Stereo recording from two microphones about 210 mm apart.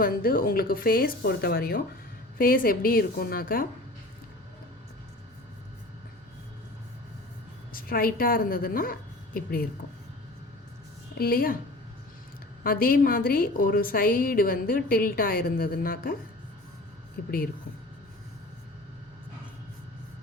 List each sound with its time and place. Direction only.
0.0 s a woman's voice: 45° left (ahead or behind)
7.7 s a woman's voice: 45° left (ahead or behind)
11.1 s speech: 45° left (ahead or behind)
12.6 s a woman's voice: 45° left (ahead or behind)
17.2 s a woman's voice: 45° left (ahead or behind)